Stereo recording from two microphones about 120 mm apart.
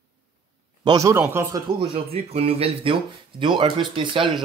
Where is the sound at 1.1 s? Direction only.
20° right (ahead or behind).